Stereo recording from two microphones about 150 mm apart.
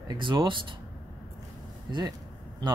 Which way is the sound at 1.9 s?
25° right (ahead or behind).